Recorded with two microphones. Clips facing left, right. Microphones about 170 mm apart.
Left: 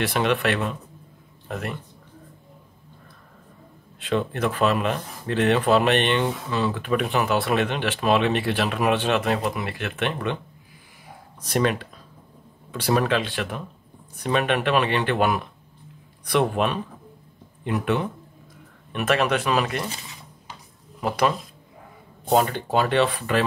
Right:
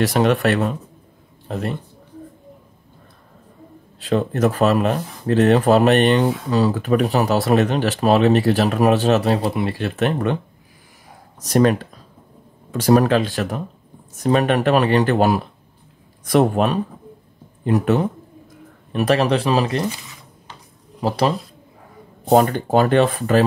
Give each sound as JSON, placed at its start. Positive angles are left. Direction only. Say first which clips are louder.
{"t": 0.0, "sound": "speech", "louder": "right 6 dB", "side_deg": -40}
{"t": 1.5, "sound": "speech", "louder": "right 5 dB", "side_deg": -30}
{"t": 4.0, "sound": "speech", "louder": "right 6 dB", "side_deg": -40}
{"t": 11.4, "sound": "speech", "louder": "right 7 dB", "side_deg": -40}
{"t": 22.3, "sound": "speech", "louder": "right 6 dB", "side_deg": -45}